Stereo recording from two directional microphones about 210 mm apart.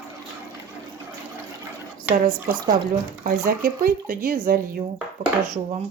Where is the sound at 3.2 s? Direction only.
40° right (ahead or behind).